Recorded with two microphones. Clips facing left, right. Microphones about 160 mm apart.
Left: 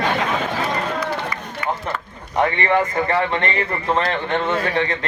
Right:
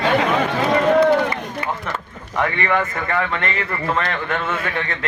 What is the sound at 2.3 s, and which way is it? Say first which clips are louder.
A man's voice: left 2 dB; 30° left (ahead or behind).